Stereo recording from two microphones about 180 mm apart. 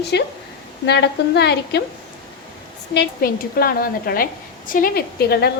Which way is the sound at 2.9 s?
65° left (ahead or behind).